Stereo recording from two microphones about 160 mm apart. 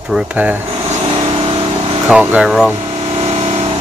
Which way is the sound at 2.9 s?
40° right (ahead or behind).